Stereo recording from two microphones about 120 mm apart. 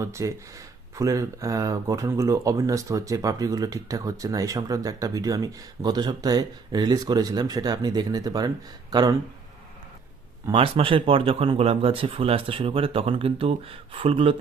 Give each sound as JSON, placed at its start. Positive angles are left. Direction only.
{"t": 0.0, "sound": "speech", "side_deg": -25}
{"t": 10.5, "sound": "speech", "side_deg": -50}